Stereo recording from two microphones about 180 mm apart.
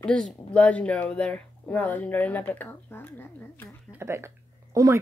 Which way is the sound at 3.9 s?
15° right (ahead or behind).